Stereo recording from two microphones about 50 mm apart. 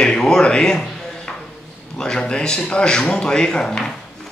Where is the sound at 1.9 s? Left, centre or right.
Centre.